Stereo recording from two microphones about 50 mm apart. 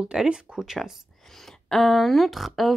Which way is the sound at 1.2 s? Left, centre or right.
Centre.